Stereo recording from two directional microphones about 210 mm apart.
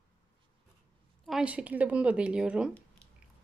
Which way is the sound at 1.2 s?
5° right (ahead or behind).